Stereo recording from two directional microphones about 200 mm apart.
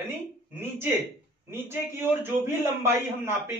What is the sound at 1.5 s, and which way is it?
A man's voice, 10° right (ahead or behind).